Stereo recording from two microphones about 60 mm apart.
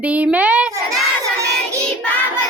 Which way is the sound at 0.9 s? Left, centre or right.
Right.